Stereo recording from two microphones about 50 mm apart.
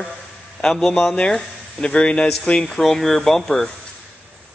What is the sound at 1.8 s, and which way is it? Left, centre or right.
Speech, left.